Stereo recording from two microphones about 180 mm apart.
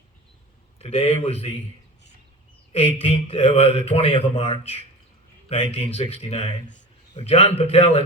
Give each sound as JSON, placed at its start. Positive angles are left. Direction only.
{"t": 0.8, "sound": "speech", "side_deg": 35}
{"t": 2.7, "sound": "speech", "side_deg": 30}